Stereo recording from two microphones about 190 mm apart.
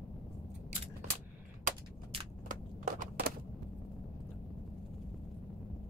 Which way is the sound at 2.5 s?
45° right (ahead or behind).